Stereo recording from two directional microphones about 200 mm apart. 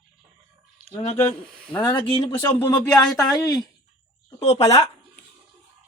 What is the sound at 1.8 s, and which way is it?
Speech, 25° left (ahead or behind).